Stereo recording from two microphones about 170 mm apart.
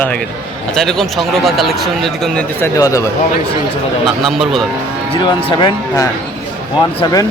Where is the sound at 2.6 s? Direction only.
20° left (ahead or behind).